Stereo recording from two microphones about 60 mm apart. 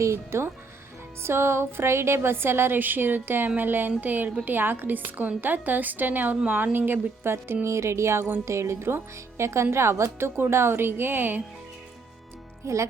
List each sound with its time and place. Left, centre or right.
0.0 s a woman's voice: right
12.6 s speech: right